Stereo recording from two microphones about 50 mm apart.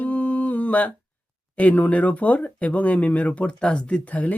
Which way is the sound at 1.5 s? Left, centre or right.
Left.